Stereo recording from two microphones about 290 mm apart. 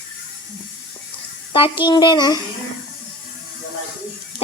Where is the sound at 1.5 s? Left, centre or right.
Centre.